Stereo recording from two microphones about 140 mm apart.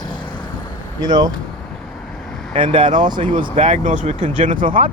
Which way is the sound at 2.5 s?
40° right (ahead or behind).